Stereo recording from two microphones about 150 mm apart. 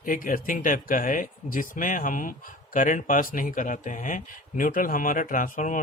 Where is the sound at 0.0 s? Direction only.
65° left (ahead or behind).